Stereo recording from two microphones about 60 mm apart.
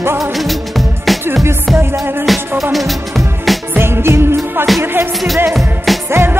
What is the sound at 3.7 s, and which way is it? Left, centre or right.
Music, right.